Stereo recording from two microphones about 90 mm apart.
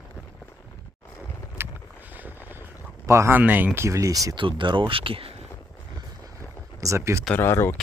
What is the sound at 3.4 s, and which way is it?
Speech, 20° right (ahead or behind).